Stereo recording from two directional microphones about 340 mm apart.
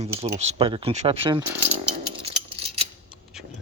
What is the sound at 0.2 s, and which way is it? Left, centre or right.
Speech, centre.